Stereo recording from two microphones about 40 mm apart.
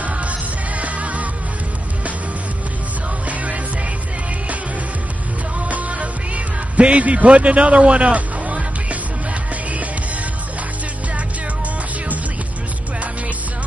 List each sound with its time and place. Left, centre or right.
0.0 s music: right
5.7 s music: right